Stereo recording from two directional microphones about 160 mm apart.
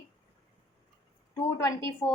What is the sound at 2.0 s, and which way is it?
Speech, 20° left (ahead or behind).